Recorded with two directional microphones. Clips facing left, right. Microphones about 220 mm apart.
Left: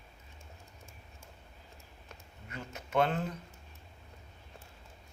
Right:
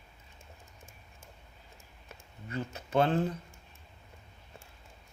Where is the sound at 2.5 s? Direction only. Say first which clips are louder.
Right 3 dB; 30° right (ahead or behind).